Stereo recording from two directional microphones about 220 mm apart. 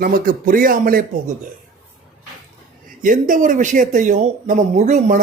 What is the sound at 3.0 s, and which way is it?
Speech, 35° right (ahead or behind).